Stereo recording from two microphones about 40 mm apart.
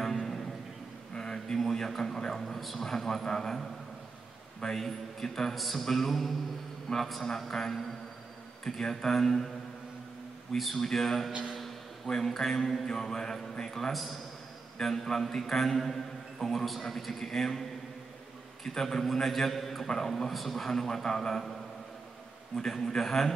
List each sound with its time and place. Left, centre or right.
0.0 s music: centre
1.1 s a man's voice: centre
4.7 s a man's voice: centre
5.5 s a sound: centre
6.9 s a man's voice: centre
10.6 s a man's voice: centre
22.7 s a man's voice: centre